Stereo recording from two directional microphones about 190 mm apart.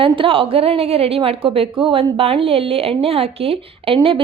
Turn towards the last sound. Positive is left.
turn(degrees=-30)  # may be behind; listen again after turning